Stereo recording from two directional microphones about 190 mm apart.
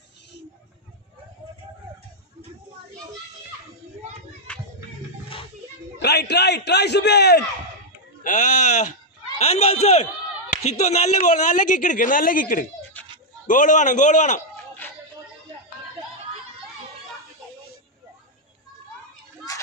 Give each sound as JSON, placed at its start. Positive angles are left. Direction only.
{"t": 5.9, "sound": "a man's voice", "side_deg": 60}
{"t": 8.2, "sound": "a man's voice", "side_deg": 40}
{"t": 13.0, "sound": "dog", "side_deg": 10}
{"t": 13.5, "sound": "a man's voice", "side_deg": 40}
{"t": 14.8, "sound": "a sound", "side_deg": 10}
{"t": 19.5, "sound": "a sound", "side_deg": 20}